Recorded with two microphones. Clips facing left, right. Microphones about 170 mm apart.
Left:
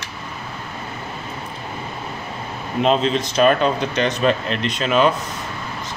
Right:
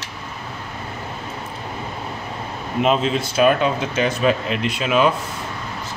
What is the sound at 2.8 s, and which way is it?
Speech, 5° right (ahead or behind).